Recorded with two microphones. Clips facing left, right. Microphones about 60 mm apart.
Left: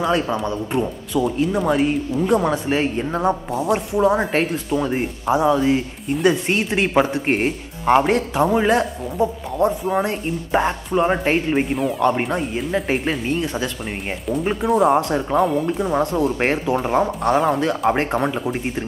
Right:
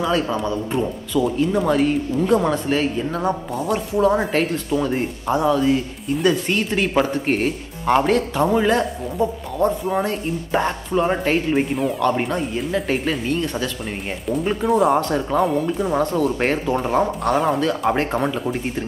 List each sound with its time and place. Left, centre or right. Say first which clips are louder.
0.0 s speech: left 1 dB; centre
2.7 s speech: even; left
3.9 s speech: right 1 dB; centre
7.9 s speech: left 1 dB; centre
11.5 s speech: even; centre
16.3 s speech: left 1 dB; centre
17.0 s speech: left 1 dB; centre
17.6 s speech: left 1 dB; centre